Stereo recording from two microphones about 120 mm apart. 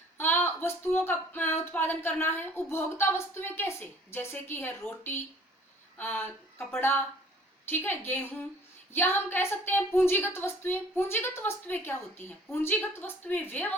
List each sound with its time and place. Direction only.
0.2 s a woman's voice: 15° left (ahead or behind)